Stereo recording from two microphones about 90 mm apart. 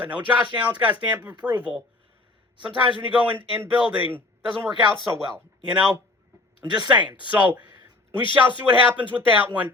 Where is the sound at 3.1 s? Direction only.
20° right (ahead or behind).